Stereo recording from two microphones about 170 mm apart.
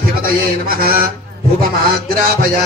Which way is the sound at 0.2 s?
60° right (ahead or behind).